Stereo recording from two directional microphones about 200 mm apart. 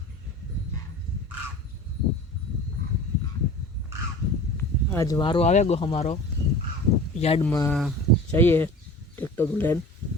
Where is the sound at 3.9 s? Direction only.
15° right (ahead or behind).